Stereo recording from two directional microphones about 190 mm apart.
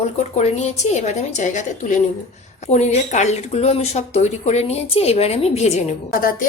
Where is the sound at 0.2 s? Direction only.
35° left (ahead or behind).